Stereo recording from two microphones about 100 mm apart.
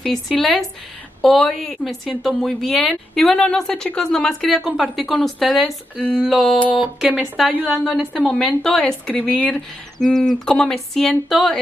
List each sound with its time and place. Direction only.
0.0 s a woman's voice: centre (ahead or behind)
6.7 s a woman's voice: 10° right (ahead or behind); by 9.2 s 5° left (ahead or behind)
9.2 s speech: 15° left (ahead or behind)
9.9 s a woman's voice: 5° left (ahead or behind)